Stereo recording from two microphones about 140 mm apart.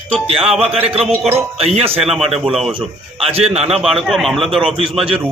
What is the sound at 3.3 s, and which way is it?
Speech, 45° right (ahead or behind).